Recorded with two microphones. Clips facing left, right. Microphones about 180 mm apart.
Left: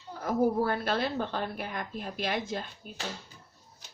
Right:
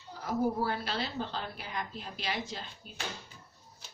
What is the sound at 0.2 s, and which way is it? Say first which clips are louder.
Speech: left 4 dB; 55° left (ahead or behind).